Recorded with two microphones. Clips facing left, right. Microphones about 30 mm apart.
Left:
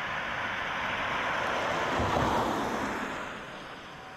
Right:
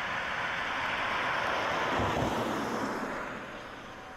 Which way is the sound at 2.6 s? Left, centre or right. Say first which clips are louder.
Left 1 dB; left.